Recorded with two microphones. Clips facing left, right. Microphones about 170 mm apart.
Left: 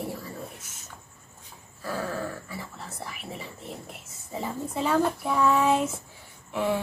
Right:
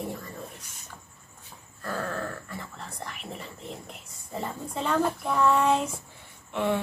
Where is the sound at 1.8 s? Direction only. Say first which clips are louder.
Left 1 dB; 5° left (ahead or behind).